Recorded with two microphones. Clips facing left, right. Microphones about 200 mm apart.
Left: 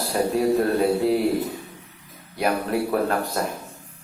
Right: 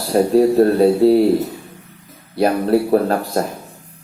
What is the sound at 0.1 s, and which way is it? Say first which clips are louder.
Speech: right 8 dB; 35° right (ahead or behind).